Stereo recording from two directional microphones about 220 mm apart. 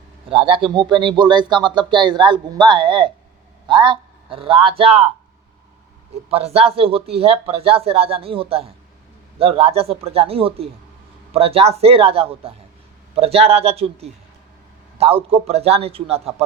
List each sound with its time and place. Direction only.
0.3 s a man's voice: 25° right (ahead or behind)
6.3 s speech: 25° right (ahead or behind)